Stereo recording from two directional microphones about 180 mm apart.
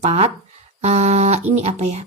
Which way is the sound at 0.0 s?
35° right (ahead or behind).